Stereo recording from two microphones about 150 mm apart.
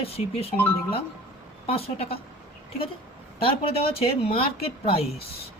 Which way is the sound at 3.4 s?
40° left (ahead or behind).